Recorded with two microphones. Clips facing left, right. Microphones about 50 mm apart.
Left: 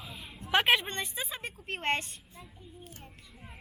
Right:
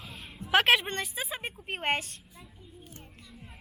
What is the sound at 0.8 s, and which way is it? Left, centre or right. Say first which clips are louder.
A woman's voice: right 2 dB; centre.